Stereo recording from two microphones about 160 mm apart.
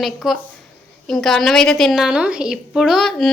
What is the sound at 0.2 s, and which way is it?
A woman's voice, centre (ahead or behind).